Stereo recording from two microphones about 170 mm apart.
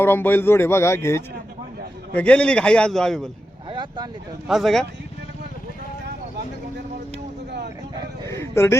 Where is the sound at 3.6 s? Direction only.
25° right (ahead or behind).